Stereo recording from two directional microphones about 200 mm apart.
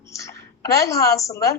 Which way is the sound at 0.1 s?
15° left (ahead or behind).